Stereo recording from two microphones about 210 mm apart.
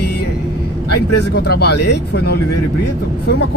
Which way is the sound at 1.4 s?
50° left (ahead or behind).